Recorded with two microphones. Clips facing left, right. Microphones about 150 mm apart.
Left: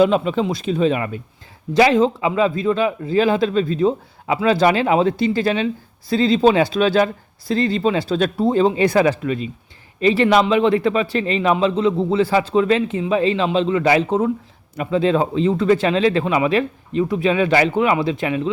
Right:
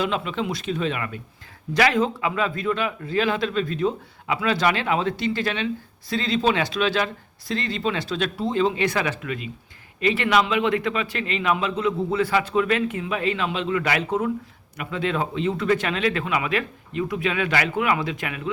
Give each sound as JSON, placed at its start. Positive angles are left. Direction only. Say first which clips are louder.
{"t": 0.0, "sound": "a man's voice", "louder": "left 9 dB", "side_deg": 40}